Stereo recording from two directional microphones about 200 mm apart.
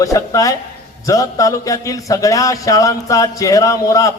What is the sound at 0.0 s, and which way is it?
Speech, 15° left (ahead or behind).